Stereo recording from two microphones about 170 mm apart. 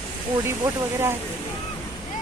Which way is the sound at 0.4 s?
15° right (ahead or behind).